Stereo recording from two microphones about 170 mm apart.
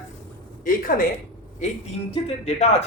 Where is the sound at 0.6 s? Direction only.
55° left (ahead or behind).